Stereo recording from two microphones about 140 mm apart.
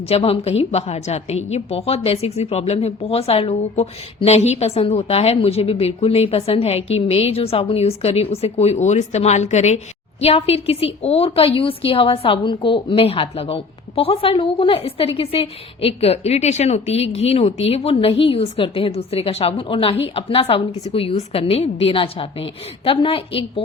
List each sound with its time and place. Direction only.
0.1 s a woman's voice: 45° left (ahead or behind)